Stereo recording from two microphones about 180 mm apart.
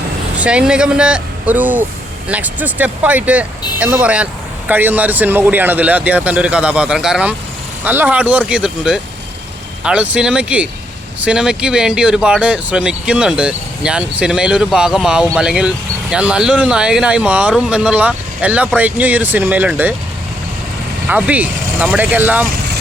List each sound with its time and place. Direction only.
0.3 s speech: 5° right (ahead or behind)
21.1 s speech: 10° right (ahead or behind)